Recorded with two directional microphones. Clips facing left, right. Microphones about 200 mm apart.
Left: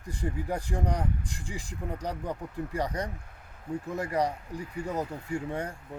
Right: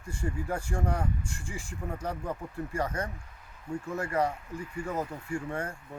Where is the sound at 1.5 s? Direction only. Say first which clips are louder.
Left 1 dB; 35° left (ahead or behind).